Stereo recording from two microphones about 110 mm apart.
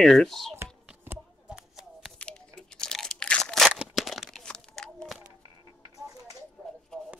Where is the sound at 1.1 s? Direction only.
20° right (ahead or behind).